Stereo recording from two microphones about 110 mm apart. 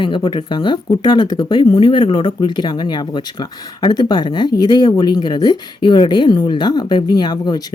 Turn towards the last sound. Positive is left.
turn(degrees=40)  # may be behind; listen again after turning